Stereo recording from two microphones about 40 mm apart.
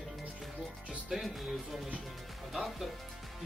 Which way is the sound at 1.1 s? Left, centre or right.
Centre.